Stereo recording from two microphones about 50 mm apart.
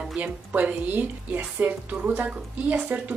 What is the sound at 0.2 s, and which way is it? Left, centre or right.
A woman's voice, right.